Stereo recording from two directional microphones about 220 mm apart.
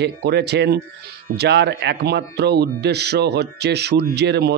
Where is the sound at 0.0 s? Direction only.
50° right (ahead or behind).